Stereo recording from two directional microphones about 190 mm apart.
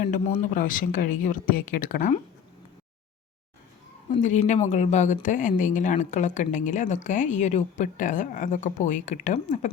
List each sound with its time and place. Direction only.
0.1 s speech: 40° left (ahead or behind)
4.1 s speech: 40° left (ahead or behind)